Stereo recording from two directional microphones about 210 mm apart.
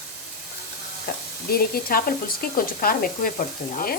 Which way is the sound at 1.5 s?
45° left (ahead or behind).